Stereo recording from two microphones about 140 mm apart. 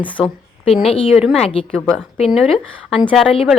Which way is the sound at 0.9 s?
45° left (ahead or behind).